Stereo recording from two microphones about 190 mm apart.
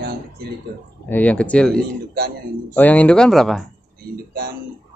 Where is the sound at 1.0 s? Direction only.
10° left (ahead or behind).